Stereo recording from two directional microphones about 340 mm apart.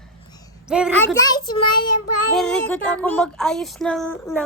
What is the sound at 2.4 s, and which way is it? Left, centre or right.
Speech, centre.